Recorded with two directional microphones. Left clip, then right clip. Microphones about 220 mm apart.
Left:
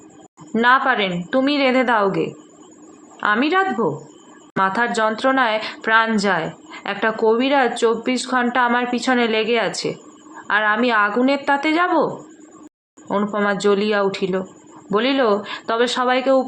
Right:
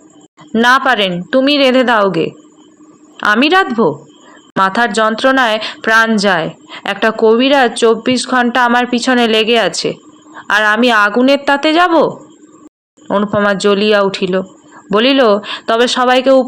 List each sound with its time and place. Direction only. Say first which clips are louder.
0.5 s speech: right 6 dB; 30° right (ahead or behind)